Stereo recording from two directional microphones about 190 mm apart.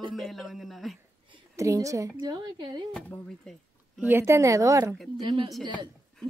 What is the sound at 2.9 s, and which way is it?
Speech, 5° left (ahead or behind).